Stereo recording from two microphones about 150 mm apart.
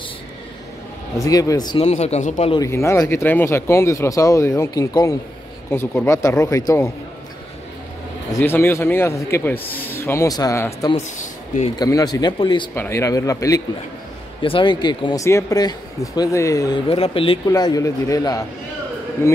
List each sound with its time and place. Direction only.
1.2 s speech: 25° left (ahead or behind)
1.8 s speech: 45° left (ahead or behind)
2.6 s speech: 20° left (ahead or behind)
8.3 s a man's voice: 15° left (ahead or behind); by 12.6 s 30° left (ahead or behind)
12.7 s speech: 15° left (ahead or behind)
14.4 s speech: 35° left (ahead or behind)
16.9 s speech: 40° left (ahead or behind)
17.5 s speech: 25° left (ahead or behind)